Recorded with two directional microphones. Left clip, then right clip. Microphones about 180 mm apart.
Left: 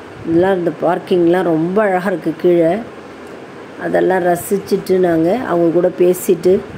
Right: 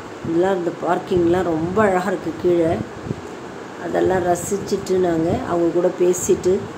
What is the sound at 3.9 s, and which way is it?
Speech, 25° left (ahead or behind).